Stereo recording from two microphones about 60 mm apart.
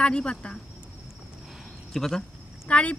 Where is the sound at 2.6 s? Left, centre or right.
Left.